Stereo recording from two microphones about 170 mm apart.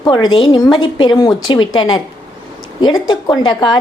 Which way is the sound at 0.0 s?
25° left (ahead or behind).